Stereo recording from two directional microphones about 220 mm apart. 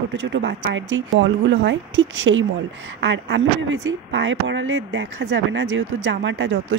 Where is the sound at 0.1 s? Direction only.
55° right (ahead or behind).